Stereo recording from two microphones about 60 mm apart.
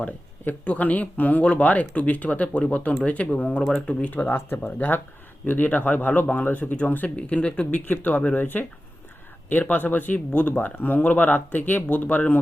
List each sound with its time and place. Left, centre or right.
0.4 s speech: left
9.5 s speech: left